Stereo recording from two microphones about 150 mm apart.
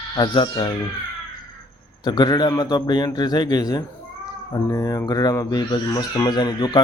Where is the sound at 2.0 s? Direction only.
25° left (ahead or behind).